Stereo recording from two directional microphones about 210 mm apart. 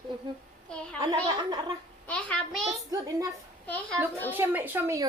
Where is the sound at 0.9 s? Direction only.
20° right (ahead or behind).